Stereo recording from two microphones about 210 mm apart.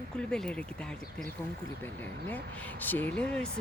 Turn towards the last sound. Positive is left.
turn(degrees=5)  # may be behind; listen again after turning